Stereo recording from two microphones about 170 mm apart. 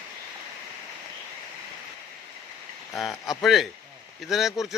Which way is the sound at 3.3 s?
Centre (ahead or behind).